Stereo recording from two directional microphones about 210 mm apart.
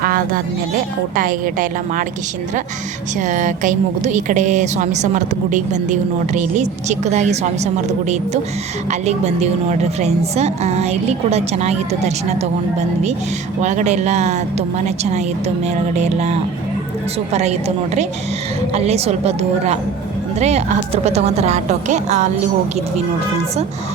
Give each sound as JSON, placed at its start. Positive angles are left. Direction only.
{"t": 0.0, "sound": "music", "side_deg": -45}
{"t": 1.1, "sound": "a woman's voice", "side_deg": -40}
{"t": 3.2, "sound": "a woman's voice", "side_deg": -35}
{"t": 13.6, "sound": "a woman's voice", "side_deg": -35}
{"t": 17.3, "sound": "a woman's voice", "side_deg": -30}